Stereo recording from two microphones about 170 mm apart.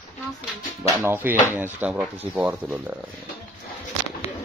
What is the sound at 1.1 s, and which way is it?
Speech, 10° right (ahead or behind).